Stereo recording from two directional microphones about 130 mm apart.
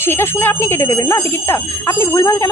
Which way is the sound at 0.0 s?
20° left (ahead or behind).